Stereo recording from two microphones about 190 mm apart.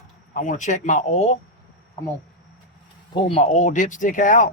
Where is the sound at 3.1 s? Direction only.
30° left (ahead or behind).